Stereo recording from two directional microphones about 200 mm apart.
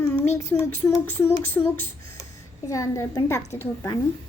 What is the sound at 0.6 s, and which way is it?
A woman's voice, 10° left (ahead or behind).